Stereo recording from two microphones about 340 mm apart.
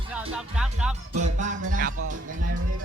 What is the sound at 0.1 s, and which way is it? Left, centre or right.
Music, centre.